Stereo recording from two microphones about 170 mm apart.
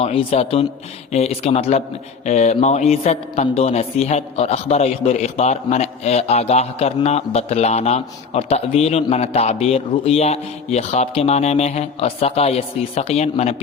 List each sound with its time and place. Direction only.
0.0 s a man's voice: 35° left (ahead or behind)